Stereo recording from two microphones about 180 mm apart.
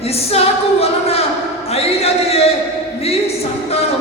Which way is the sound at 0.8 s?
35° left (ahead or behind).